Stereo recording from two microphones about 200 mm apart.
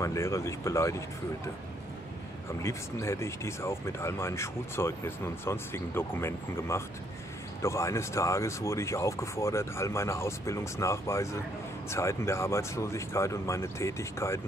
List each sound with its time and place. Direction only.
0.0 s speech: 15° left (ahead or behind)
2.6 s speech: 15° left (ahead or behind)